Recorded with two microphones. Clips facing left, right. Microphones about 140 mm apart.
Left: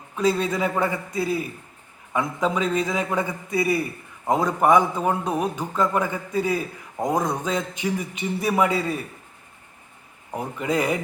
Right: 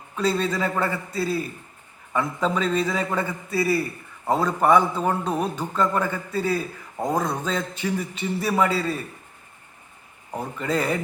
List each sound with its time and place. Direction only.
0.2 s a man's voice: 10° left (ahead or behind)
10.3 s a man's voice: 15° left (ahead or behind)